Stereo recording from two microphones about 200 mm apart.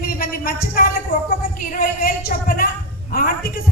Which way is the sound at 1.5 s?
45° left (ahead or behind).